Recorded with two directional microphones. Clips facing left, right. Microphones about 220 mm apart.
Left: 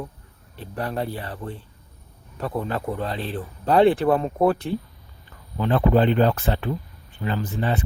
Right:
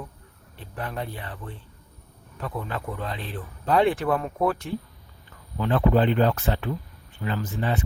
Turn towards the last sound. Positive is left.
turn(degrees=35)  # may be behind; listen again after turning